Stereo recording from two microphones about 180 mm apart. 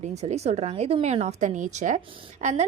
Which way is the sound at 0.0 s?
40° right (ahead or behind).